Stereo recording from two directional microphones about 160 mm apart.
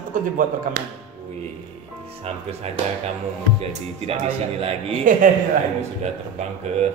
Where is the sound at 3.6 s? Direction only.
40° right (ahead or behind).